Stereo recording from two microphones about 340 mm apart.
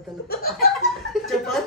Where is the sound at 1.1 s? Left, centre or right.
Centre.